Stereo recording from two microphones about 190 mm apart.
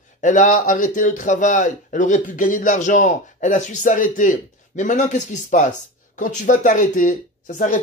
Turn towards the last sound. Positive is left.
turn(degrees=40)  # may be behind; listen again after turning